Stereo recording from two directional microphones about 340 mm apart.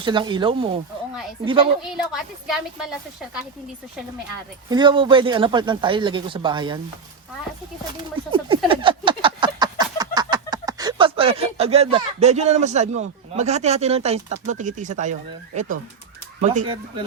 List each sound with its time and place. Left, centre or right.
0.0 s speech: centre
1.8 s a woman's voice: centre
4.7 s speech: centre
8.3 s a sound: centre
16.4 s speech: right